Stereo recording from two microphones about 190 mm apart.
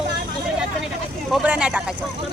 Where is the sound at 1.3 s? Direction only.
5° right (ahead or behind).